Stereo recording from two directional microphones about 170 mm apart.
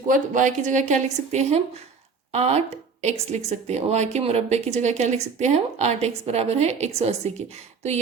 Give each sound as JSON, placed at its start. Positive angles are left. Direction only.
{"t": 0.1, "sound": "a woman's voice", "side_deg": -50}